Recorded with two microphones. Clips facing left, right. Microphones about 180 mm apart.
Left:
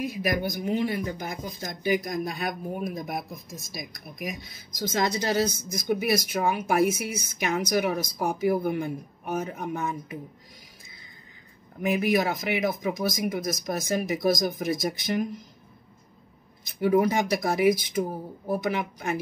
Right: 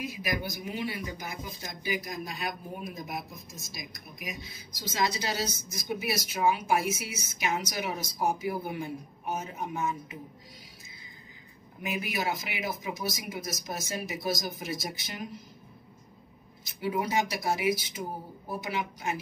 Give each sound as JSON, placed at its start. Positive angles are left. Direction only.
{"t": 0.0, "sound": "speech", "side_deg": 55}
{"t": 11.8, "sound": "speech", "side_deg": 55}
{"t": 16.8, "sound": "speech", "side_deg": 55}